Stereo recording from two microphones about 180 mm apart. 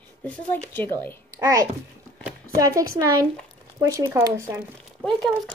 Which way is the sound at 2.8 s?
20° right (ahead or behind).